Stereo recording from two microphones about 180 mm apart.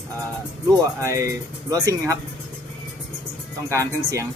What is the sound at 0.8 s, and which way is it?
Speech, 15° right (ahead or behind).